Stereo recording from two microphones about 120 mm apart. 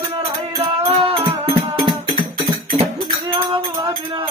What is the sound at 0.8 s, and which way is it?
Music, 50° right (ahead or behind).